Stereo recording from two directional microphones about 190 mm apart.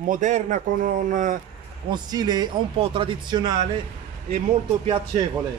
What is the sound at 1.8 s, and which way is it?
Speech, 20° right (ahead or behind).